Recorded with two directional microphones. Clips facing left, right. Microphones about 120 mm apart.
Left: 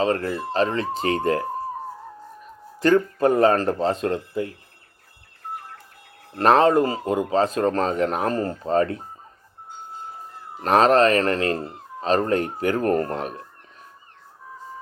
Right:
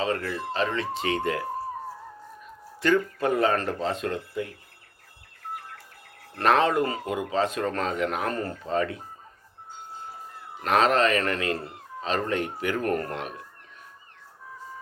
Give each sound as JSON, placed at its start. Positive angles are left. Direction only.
{"t": 0.0, "sound": "speech", "side_deg": 40}
{"t": 2.8, "sound": "speech", "side_deg": 40}
{"t": 6.3, "sound": "speech", "side_deg": 35}
{"t": 10.6, "sound": "speech", "side_deg": 35}